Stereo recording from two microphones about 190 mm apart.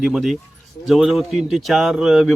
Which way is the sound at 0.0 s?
Centre (ahead or behind).